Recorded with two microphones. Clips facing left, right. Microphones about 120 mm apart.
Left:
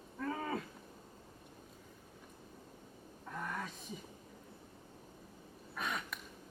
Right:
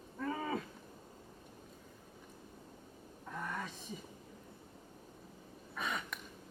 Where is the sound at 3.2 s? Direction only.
Centre (ahead or behind).